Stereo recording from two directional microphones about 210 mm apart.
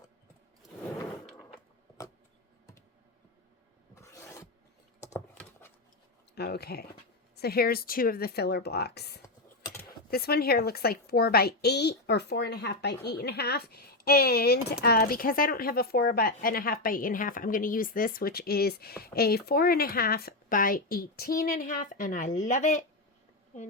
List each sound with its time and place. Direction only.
3.9 s filing: 15° left (ahead or behind)
4.9 s patter: 10° left (ahead or behind)
6.3 s a woman's voice: 50° left (ahead or behind)
9.2 s typing: 15° left (ahead or behind)
10.1 s a woman's voice: 50° left (ahead or behind)